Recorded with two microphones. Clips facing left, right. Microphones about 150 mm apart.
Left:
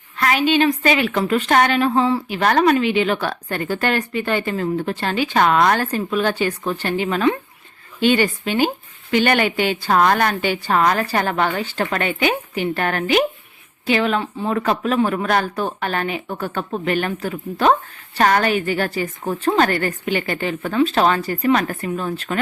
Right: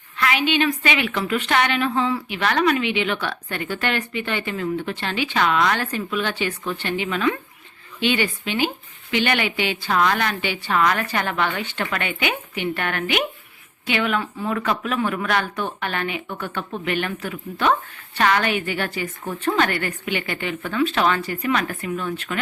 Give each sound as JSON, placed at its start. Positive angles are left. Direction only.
{"t": 0.2, "sound": "a woman's voice", "side_deg": 40}